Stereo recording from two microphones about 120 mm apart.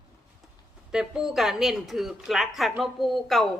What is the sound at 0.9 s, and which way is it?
Speech, 5° right (ahead or behind).